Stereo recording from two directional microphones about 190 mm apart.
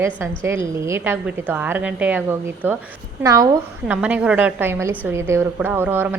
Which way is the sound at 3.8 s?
5° right (ahead or behind).